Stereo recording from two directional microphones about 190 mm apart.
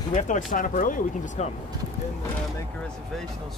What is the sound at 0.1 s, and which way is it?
Speech, 40° left (ahead or behind).